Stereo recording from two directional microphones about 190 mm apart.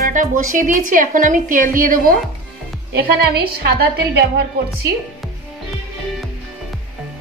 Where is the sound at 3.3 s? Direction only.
55° right (ahead or behind).